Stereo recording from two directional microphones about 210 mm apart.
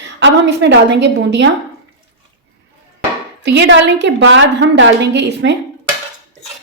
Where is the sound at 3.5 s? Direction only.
60° right (ahead or behind).